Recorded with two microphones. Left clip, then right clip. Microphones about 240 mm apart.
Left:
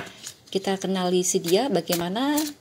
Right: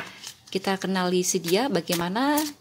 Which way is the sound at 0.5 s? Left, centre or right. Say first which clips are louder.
Left 1 dB; centre.